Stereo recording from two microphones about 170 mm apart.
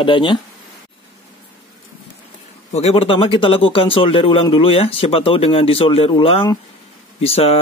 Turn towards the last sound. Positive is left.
turn(degrees=35)  # may be behind; listen again after turning